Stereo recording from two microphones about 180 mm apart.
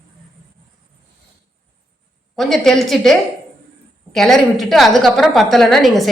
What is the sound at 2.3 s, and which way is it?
A woman's voice, centre (ahead or behind).